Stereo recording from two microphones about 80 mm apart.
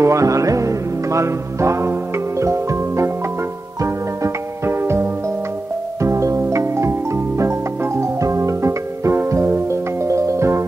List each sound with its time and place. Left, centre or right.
0.0 s music: right
6.0 s music: right